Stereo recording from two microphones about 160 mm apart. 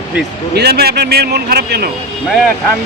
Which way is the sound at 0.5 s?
85° right.